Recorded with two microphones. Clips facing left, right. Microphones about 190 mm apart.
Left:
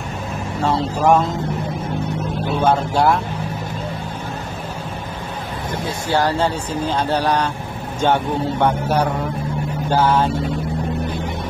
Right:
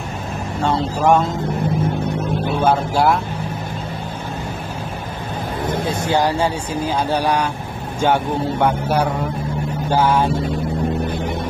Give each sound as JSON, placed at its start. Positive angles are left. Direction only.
{"t": 0.7, "sound": "speech", "side_deg": 0}
{"t": 2.6, "sound": "speech", "side_deg": -5}
{"t": 6.0, "sound": "speech", "side_deg": -15}